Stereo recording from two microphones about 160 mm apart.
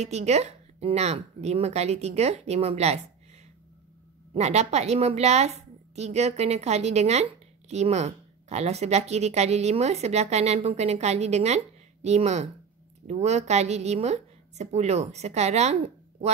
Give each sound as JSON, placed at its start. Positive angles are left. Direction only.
{"t": 0.0, "sound": "speech", "side_deg": -45}
{"t": 4.3, "sound": "a woman's voice", "side_deg": -45}